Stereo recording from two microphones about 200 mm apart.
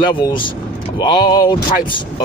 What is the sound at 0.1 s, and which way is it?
Speech, 25° left (ahead or behind).